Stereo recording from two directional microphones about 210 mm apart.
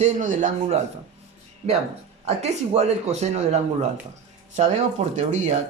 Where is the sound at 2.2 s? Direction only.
30° right (ahead or behind).